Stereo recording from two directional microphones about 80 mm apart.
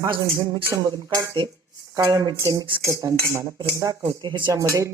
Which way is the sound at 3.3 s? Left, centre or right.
Right.